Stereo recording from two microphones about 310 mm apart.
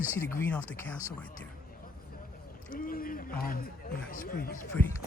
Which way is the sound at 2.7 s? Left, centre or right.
Left.